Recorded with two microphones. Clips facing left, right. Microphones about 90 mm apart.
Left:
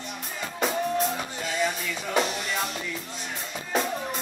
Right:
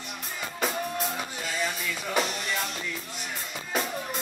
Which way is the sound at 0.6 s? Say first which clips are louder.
Left 5 dB; centre (ahead or behind).